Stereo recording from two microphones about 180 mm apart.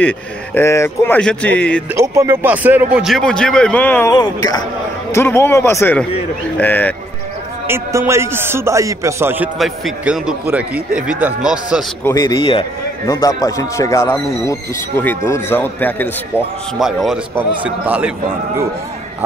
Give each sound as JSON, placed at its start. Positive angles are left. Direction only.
{"t": 0.6, "sound": "a man's voice", "side_deg": 15}
{"t": 2.0, "sound": "speech", "side_deg": -15}
{"t": 4.1, "sound": "a man's voice", "side_deg": 20}
{"t": 7.6, "sound": "a man's voice", "side_deg": -10}
{"t": 9.6, "sound": "a man's voice", "side_deg": 0}
{"t": 12.0, "sound": "a man's voice", "side_deg": 15}
{"t": 12.4, "sound": "speech", "side_deg": 30}
{"t": 13.0, "sound": "a man's voice", "side_deg": 20}
{"t": 16.7, "sound": "a man's voice", "side_deg": 0}